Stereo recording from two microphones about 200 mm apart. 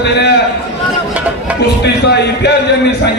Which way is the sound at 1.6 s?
55° left (ahead or behind).